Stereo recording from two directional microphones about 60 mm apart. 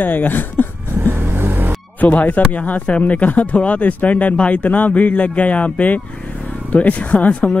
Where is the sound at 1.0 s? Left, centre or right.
Right.